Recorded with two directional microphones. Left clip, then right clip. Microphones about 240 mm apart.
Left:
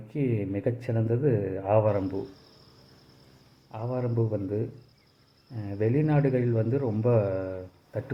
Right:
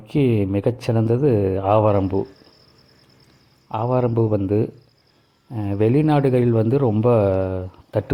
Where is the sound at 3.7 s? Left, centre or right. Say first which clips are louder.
Right 11 dB; right.